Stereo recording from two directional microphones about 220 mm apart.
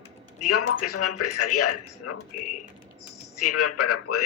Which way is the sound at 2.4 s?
35° left (ahead or behind).